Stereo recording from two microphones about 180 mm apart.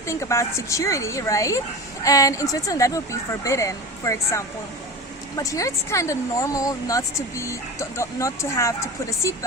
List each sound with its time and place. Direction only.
0.1 s speech: 15° left (ahead or behind)